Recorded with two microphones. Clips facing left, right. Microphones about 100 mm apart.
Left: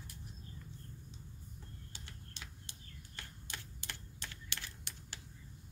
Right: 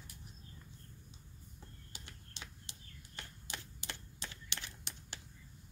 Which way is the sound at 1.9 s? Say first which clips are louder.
Right 2 dB; 20° right (ahead or behind).